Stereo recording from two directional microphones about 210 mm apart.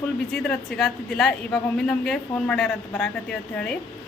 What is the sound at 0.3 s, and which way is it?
A woman's voice, centre (ahead or behind).